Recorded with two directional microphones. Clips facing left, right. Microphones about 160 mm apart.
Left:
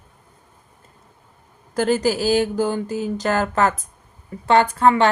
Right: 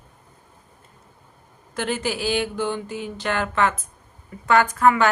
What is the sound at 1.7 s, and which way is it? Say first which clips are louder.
A woman's voice: left 7 dB; 40° left (ahead or behind).